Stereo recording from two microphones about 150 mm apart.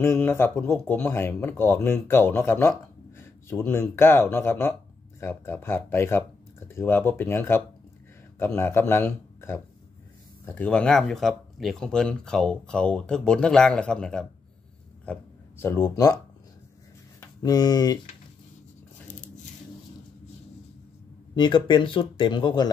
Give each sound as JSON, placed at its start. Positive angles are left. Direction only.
{"t": 0.0, "sound": "speech", "side_deg": 15}
{"t": 3.2, "sound": "a sound", "side_deg": 15}
{"t": 3.9, "sound": "speech", "side_deg": 15}
{"t": 17.4, "sound": "speech", "side_deg": 25}
{"t": 21.4, "sound": "speech", "side_deg": 30}